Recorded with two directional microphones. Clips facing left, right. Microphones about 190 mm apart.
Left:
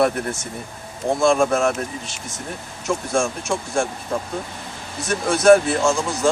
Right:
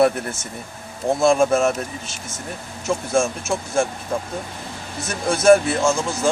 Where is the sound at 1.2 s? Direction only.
Centre (ahead or behind).